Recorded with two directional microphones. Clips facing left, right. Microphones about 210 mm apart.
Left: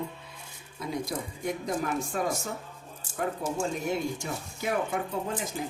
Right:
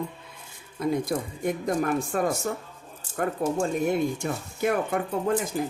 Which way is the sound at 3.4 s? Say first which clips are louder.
Right 9 dB; 60° right (ahead or behind).